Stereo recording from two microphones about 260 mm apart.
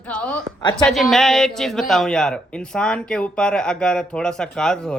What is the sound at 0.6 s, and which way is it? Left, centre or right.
Speech, centre.